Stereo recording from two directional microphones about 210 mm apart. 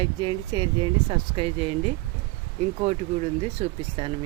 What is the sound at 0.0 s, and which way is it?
Speech, 25° right (ahead or behind).